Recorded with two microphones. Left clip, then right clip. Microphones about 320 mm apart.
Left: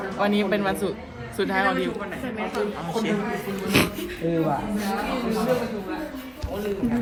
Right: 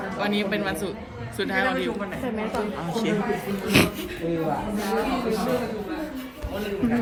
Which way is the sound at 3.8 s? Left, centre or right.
Centre.